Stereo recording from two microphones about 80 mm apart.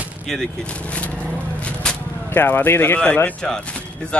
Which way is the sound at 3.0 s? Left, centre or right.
Centre.